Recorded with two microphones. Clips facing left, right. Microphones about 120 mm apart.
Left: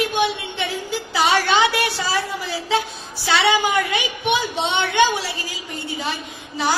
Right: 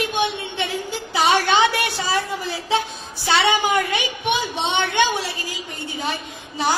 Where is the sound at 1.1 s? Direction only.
15° right (ahead or behind).